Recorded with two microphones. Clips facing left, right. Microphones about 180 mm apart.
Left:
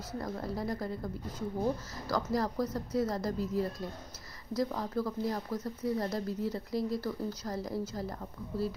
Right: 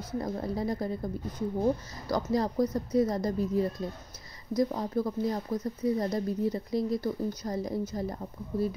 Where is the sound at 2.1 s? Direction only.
20° right (ahead or behind).